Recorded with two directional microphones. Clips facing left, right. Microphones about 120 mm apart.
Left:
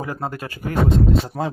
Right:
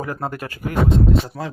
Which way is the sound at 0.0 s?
20° left (ahead or behind).